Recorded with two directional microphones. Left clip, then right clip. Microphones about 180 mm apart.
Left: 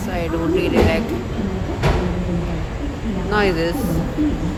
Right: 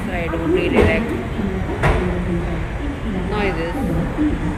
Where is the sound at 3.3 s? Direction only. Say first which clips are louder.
Left 4 dB; 50° left (ahead or behind).